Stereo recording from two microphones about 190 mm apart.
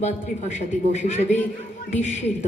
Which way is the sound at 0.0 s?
35° left (ahead or behind).